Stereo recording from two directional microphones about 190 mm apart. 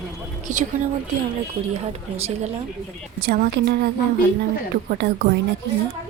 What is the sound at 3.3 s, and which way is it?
Speech, 55° right (ahead or behind).